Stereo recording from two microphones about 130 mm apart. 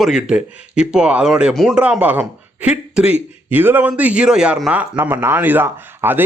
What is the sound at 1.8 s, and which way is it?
A man's voice, 10° right (ahead or behind).